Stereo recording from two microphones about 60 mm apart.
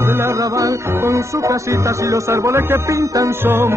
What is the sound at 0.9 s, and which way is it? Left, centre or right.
Music, right.